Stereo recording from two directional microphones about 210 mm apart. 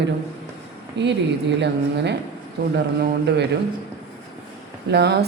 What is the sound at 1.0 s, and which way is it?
Speech, 55° right (ahead or behind).